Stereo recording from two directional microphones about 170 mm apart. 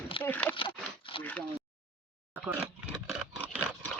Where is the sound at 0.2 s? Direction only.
10° left (ahead or behind).